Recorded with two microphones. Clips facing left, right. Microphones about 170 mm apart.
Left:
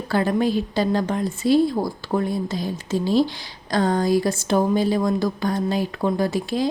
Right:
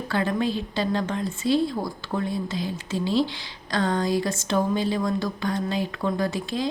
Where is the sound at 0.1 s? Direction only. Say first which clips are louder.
Left 5 dB; 35° left (ahead or behind).